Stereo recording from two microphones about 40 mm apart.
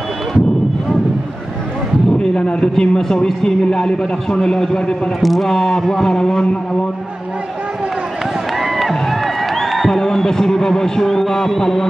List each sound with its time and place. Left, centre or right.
2.3 s a man's voice: left
5.2 s a man's voice: centre
8.5 s music: centre
9.8 s speech: centre